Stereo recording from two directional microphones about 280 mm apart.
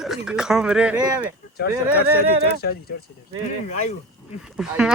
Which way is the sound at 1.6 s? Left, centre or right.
Left.